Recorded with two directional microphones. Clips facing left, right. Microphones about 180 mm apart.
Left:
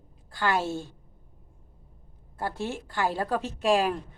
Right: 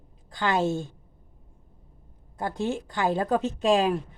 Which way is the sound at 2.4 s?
15° right (ahead or behind).